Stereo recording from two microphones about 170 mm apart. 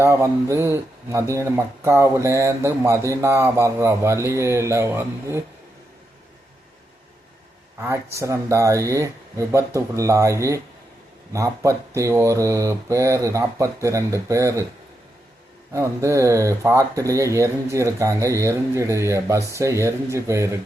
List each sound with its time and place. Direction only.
0.0 s speech: 15° right (ahead or behind)
7.8 s speech: 15° right (ahead or behind)
15.7 s speech: 15° right (ahead or behind)